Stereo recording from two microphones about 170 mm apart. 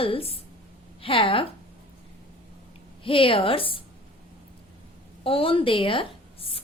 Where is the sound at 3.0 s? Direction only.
30° left (ahead or behind).